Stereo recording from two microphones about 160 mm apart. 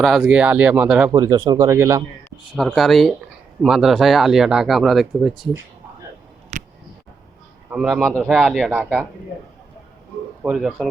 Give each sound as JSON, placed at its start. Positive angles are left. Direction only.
{"t": 0.0, "sound": "speech", "side_deg": 0}
{"t": 1.1, "sound": "speech", "side_deg": -25}
{"t": 2.6, "sound": "speech", "side_deg": 0}
{"t": 6.5, "sound": "a sound", "side_deg": -45}
{"t": 7.7, "sound": "speech", "side_deg": -5}
{"t": 10.4, "sound": "speech", "side_deg": -5}